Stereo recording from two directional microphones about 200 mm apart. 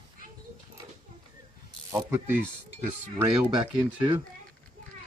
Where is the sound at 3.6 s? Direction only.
20° right (ahead or behind).